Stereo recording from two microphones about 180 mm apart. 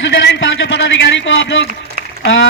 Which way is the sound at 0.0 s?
90° left.